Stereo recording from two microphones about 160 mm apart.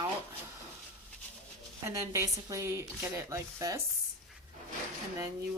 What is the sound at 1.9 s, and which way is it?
A woman's voice, 20° right (ahead or behind).